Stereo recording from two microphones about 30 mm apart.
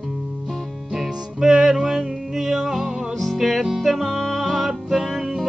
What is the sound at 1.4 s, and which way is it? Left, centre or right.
Music, centre.